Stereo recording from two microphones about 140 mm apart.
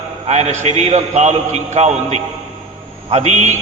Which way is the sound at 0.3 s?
55° right (ahead or behind).